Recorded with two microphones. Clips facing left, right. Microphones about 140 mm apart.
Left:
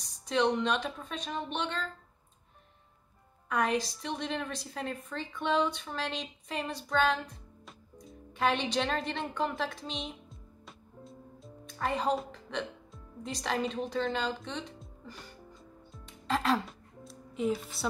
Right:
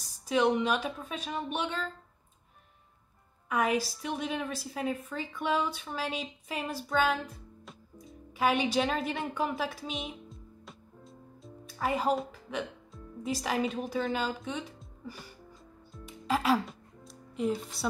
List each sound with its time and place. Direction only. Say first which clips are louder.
0.0 s a woman's voice: right 2 dB; 5° right (ahead or behind)
3.4 s a woman's voice: right 1 dB; 5° right (ahead or behind)
7.6 s music: right 1 dB; centre (ahead or behind)